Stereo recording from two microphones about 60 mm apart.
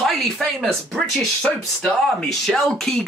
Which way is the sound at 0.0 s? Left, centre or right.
Centre.